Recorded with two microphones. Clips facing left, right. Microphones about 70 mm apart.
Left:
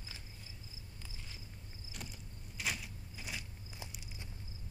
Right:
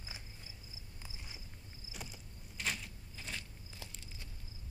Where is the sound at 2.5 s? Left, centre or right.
Centre.